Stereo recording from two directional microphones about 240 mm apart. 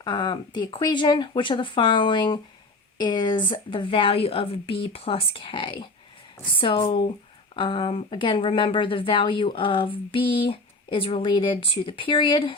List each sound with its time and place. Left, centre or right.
0.0 s a woman's voice: centre